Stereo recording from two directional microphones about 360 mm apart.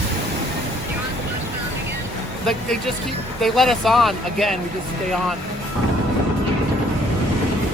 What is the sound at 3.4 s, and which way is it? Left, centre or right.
Speech, centre.